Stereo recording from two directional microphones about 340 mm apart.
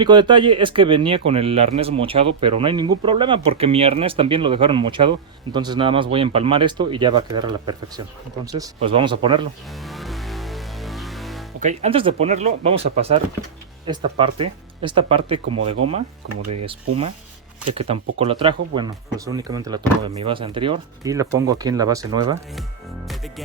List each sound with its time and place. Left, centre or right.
0.0 s speech: centre
9.8 s music: centre
11.6 s speech: centre
16.4 s speech: right
16.6 s speech: centre